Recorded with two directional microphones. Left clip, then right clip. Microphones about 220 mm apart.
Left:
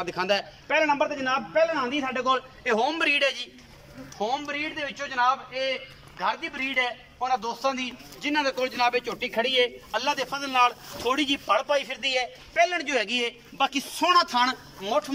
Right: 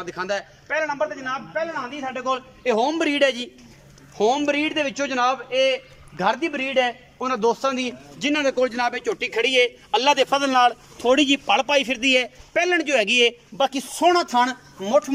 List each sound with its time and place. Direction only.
0.0 s a man's voice: centre (ahead or behind)
2.6 s a man's voice: 20° right (ahead or behind)
4.2 s a man's voice: 50° right (ahead or behind); by 15.1 s 30° right (ahead or behind)